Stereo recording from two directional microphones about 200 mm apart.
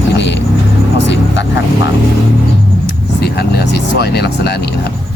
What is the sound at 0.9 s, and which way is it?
Vehicle, 60° left (ahead or behind).